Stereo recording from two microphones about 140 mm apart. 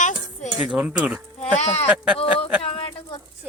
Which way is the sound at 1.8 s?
5° right (ahead or behind).